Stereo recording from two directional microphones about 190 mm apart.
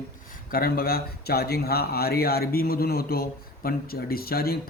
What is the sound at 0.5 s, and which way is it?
Speech, 50° left (ahead or behind).